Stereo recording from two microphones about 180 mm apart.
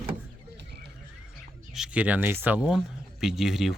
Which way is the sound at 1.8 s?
10° right (ahead or behind).